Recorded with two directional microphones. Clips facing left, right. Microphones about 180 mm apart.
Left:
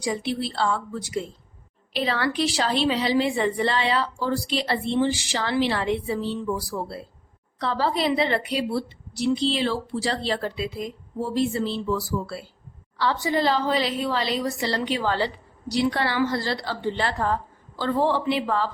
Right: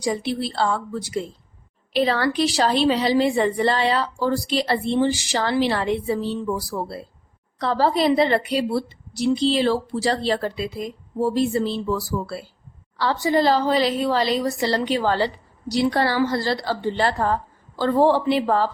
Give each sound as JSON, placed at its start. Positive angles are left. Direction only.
{"t": 0.0, "sound": "a woman's voice", "side_deg": -40}